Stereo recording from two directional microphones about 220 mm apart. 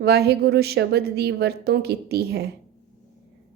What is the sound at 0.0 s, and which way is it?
A woman's voice, 45° right (ahead or behind).